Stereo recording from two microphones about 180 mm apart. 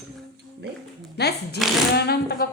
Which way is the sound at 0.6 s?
65° right (ahead or behind).